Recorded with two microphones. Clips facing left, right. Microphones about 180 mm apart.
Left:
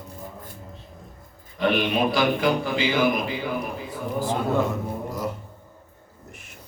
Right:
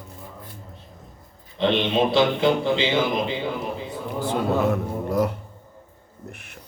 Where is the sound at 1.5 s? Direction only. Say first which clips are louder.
Right 2 dB; 25° right (ahead or behind).